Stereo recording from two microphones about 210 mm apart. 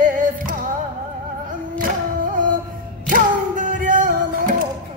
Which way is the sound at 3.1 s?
40° right (ahead or behind).